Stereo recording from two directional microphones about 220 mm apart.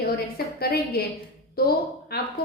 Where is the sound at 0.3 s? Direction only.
45° left (ahead or behind).